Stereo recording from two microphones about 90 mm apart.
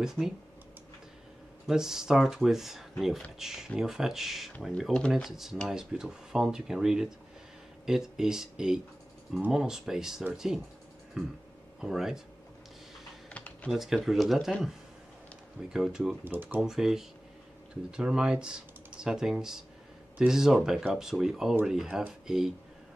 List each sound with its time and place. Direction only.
0.0 s speech: 5° right (ahead or behind)
1.7 s speech: 5° right (ahead or behind)
11.8 s speech: 5° right (ahead or behind)
13.3 s computer keyboard: 15° left (ahead or behind)
13.7 s speech: 5° right (ahead or behind)
15.7 s speech: 5° right (ahead or behind)
16.3 s speech: 20° right (ahead or behind)
16.6 s speech: 5° right (ahead or behind)